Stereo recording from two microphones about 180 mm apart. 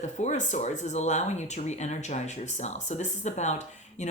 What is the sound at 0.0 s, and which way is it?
Speech, 45° left (ahead or behind).